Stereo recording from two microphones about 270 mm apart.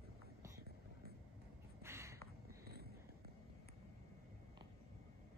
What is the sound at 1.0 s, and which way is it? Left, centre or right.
Vehicle, right.